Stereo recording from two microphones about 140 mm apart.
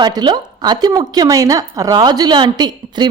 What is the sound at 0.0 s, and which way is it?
A woman's voice, 30° right (ahead or behind).